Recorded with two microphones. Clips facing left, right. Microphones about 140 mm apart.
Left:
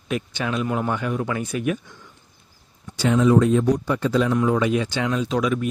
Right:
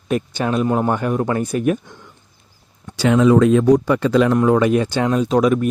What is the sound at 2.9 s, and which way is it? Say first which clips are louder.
Speech: right 4 dB; 90° right.